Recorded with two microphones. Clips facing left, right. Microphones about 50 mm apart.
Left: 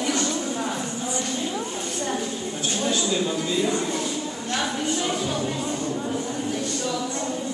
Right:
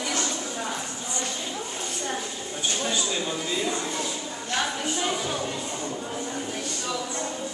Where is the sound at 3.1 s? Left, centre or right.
Centre.